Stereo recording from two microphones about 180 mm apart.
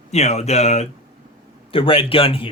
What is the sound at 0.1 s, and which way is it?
Speech, 40° left (ahead or behind).